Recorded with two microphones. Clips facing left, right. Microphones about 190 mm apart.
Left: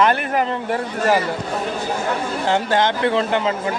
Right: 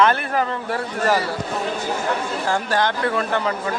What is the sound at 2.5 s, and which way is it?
Speech, 20° left (ahead or behind).